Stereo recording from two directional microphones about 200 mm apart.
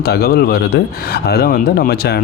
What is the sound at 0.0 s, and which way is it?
A man's voice, 50° left (ahead or behind).